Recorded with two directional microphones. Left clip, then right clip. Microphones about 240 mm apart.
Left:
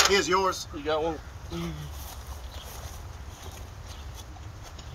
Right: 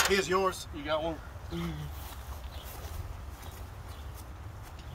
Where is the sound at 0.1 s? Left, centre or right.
Centre.